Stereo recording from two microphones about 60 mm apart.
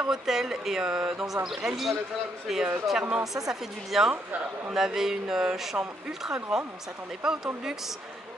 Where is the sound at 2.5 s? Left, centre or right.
Centre.